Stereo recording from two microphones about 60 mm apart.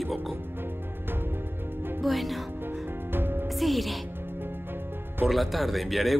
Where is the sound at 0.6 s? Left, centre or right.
Right.